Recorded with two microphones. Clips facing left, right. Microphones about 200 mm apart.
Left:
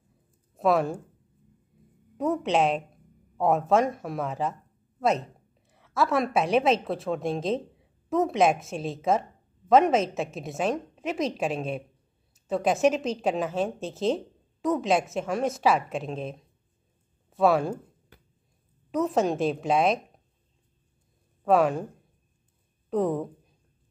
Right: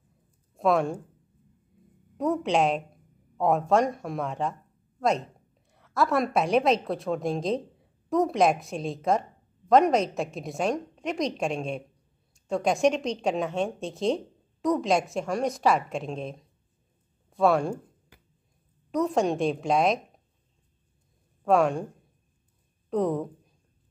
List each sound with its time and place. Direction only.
0.6 s speech: centre (ahead or behind)
2.1 s a woman's voice: centre (ahead or behind)
5.7 s a woman's voice: centre (ahead or behind)
18.9 s a woman's voice: centre (ahead or behind)
21.5 s a woman's voice: centre (ahead or behind)
22.8 s speech: centre (ahead or behind)